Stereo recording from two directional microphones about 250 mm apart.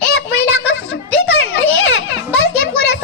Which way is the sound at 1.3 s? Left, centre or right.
Left.